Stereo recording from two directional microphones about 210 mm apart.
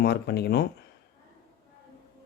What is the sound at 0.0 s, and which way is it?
Speech, 50° left (ahead or behind).